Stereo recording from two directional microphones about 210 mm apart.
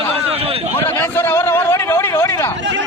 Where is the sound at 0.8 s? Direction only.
10° left (ahead or behind).